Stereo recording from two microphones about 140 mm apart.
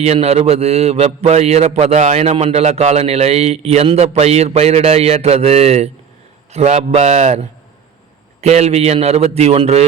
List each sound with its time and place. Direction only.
0.0 s a man's voice: 50° right (ahead or behind)